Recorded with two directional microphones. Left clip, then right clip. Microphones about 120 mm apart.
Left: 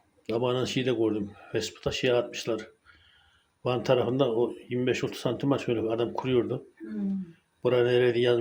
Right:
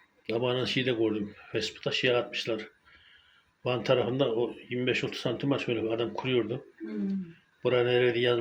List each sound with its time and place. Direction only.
0.3 s speech: 30° left (ahead or behind)
7.6 s speech: 35° left (ahead or behind)